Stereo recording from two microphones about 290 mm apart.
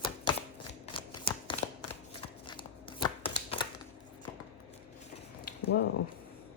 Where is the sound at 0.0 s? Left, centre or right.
Centre.